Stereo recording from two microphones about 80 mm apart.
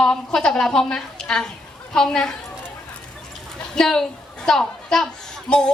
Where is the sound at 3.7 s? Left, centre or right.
Centre.